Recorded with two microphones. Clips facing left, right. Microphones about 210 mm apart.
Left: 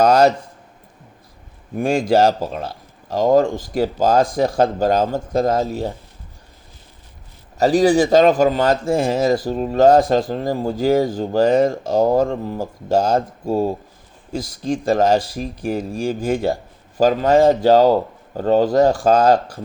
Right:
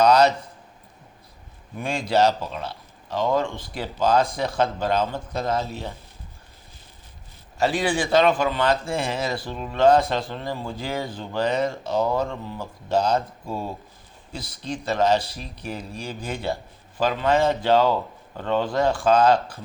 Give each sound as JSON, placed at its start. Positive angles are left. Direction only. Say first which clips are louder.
{"t": 0.0, "sound": "speech", "louder": "left 3 dB", "side_deg": 45}
{"t": 1.7, "sound": "speech", "louder": "left 7 dB", "side_deg": 45}
{"t": 7.6, "sound": "speech", "louder": "left 9 dB", "side_deg": 40}